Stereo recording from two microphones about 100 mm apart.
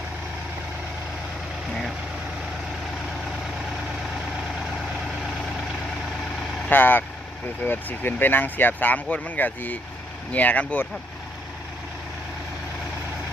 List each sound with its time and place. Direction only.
6.7 s speech: 20° left (ahead or behind)